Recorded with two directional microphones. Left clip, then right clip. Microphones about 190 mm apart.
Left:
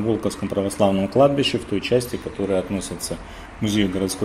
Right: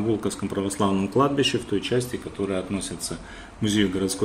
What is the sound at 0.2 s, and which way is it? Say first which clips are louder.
Speech: left 4 dB; 20° left (ahead or behind).